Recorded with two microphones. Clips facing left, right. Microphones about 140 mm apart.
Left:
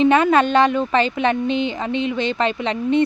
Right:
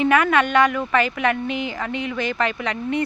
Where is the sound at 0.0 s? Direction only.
25° left (ahead or behind).